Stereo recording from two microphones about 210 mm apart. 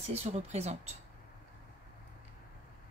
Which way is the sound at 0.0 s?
30° right (ahead or behind).